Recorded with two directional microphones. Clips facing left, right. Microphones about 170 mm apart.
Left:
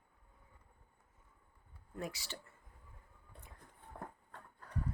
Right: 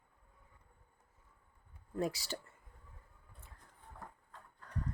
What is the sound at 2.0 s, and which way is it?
Speech, 35° right (ahead or behind).